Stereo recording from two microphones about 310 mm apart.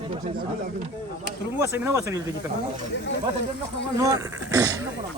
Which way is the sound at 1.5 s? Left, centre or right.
Centre.